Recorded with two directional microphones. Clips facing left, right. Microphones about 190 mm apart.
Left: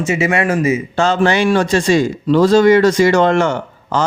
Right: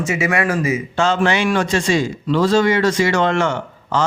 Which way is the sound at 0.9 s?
40° left (ahead or behind).